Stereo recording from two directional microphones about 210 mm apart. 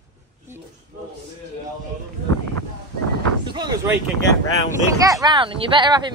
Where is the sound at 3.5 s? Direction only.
20° right (ahead or behind).